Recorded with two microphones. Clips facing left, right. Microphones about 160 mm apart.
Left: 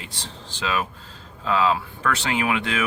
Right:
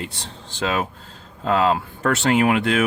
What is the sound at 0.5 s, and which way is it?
Speech, 55° right (ahead or behind).